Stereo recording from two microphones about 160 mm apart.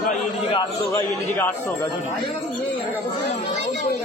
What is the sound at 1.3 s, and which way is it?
Speech, 15° left (ahead or behind).